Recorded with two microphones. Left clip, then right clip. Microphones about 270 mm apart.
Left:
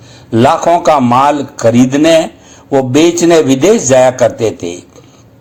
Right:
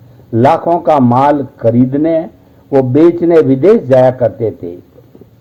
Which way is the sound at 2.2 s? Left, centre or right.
Left.